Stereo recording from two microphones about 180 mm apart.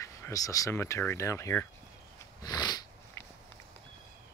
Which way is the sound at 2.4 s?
20° left (ahead or behind).